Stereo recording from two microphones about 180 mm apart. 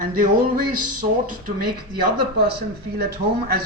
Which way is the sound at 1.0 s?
55° right (ahead or behind).